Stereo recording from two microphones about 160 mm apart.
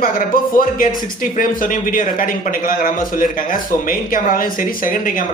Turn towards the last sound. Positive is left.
turn(degrees=60)  # may be behind; listen again after turning